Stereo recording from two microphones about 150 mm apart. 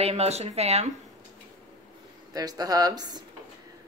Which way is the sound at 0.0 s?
45° right (ahead or behind).